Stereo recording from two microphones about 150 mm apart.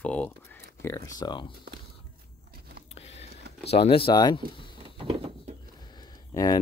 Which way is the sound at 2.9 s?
45° left (ahead or behind).